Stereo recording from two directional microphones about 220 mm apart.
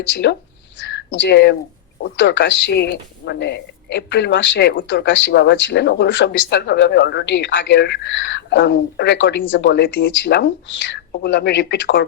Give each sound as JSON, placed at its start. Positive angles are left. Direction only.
{"t": 0.2, "sound": "speech", "side_deg": 50}